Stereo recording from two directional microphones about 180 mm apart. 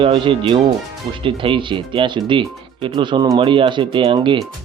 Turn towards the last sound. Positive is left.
turn(degrees=-30)  # may be behind; listen again after turning